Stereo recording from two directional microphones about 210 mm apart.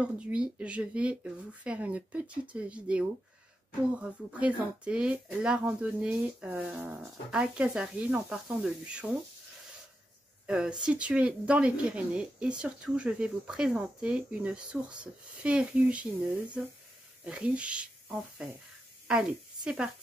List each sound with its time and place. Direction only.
0.0 s speech: 5° right (ahead or behind)
10.4 s speech: 5° right (ahead or behind)
17.2 s a woman's voice: 5° right (ahead or behind)